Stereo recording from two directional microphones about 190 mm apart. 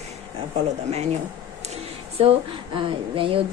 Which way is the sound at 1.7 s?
30° right (ahead or behind).